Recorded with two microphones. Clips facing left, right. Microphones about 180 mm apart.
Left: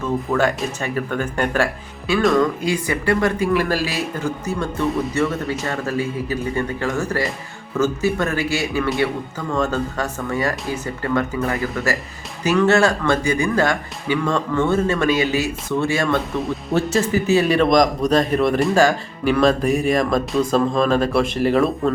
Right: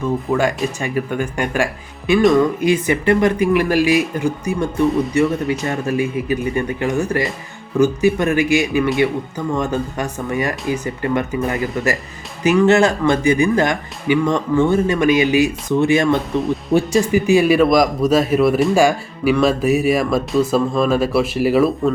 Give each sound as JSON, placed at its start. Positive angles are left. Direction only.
{"t": 0.3, "sound": "speech", "side_deg": -10}